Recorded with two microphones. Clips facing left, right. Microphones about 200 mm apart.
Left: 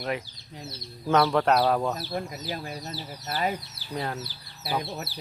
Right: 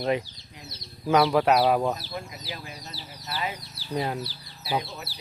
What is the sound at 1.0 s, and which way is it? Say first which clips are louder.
Speech: right 1 dB; 5° right (ahead or behind).